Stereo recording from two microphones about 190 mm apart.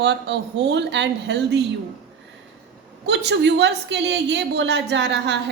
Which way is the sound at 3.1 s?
65° right (ahead or behind).